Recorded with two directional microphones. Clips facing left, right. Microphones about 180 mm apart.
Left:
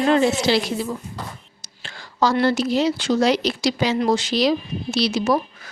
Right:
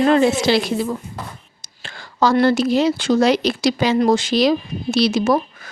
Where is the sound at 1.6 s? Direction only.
55° right (ahead or behind).